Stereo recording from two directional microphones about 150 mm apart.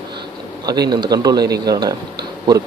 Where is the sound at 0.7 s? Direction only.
25° right (ahead or behind).